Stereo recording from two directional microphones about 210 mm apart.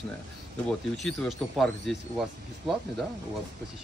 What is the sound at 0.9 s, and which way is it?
Speech, centre (ahead or behind).